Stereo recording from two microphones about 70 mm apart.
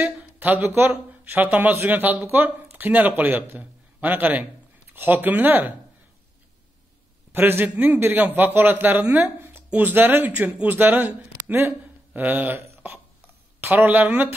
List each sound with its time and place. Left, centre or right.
0.0 s speech: right
7.3 s speech: right
9.2 s a sound: right
9.7 s speech: right
14.0 s speech: right